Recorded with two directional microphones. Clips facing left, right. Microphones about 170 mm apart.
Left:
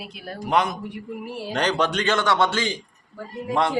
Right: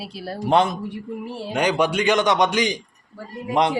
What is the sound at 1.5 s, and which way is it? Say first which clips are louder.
A man's voice: right 3 dB; 10° right (ahead or behind).